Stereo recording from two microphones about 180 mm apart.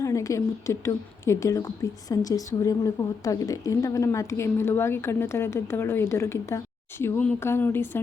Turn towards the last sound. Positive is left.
turn(degrees=10)  # may be behind; listen again after turning